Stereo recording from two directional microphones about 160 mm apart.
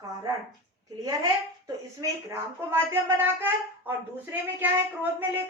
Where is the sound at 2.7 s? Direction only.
15° right (ahead or behind).